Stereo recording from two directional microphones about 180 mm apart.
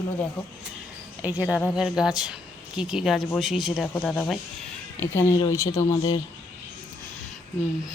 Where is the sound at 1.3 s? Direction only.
15° left (ahead or behind).